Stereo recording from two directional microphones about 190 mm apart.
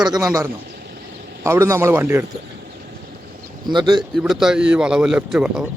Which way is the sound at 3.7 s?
25° right (ahead or behind).